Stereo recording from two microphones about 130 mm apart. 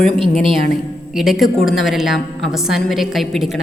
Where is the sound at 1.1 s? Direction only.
Centre (ahead or behind).